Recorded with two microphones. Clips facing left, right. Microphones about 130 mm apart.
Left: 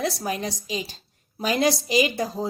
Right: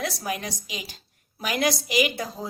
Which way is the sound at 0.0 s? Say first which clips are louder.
Left 3 dB; 30° left (ahead or behind).